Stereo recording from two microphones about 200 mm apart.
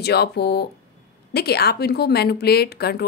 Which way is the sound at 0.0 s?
55° left (ahead or behind).